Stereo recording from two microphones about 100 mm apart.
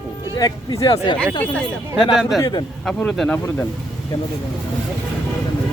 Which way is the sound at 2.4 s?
45° left (ahead or behind).